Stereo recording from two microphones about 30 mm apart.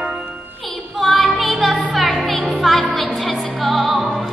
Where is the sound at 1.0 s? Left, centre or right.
Centre.